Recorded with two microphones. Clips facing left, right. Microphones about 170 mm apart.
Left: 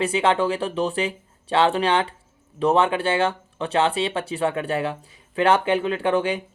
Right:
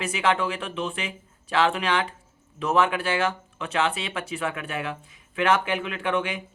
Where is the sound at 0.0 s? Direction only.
30° left (ahead or behind).